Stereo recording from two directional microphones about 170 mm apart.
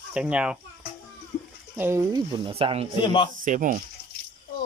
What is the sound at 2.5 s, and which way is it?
Speech, 35° right (ahead or behind).